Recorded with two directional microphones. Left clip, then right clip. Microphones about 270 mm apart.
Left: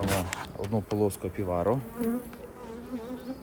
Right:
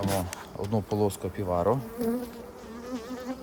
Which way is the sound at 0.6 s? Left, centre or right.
Right.